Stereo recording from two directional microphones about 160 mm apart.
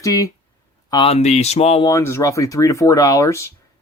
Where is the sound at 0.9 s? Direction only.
35° left (ahead or behind).